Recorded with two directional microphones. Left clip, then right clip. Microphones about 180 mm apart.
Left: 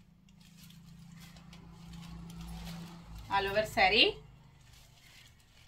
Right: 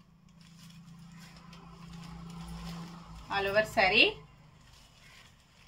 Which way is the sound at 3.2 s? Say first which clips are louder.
Right 2 dB; 15° right (ahead or behind).